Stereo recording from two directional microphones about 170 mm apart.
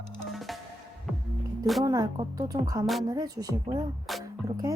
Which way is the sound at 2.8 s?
Centre (ahead or behind).